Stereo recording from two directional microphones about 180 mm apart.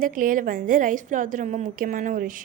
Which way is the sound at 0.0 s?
50° right (ahead or behind).